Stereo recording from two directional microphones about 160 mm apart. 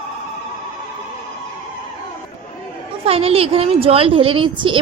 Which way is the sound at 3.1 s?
35° right (ahead or behind).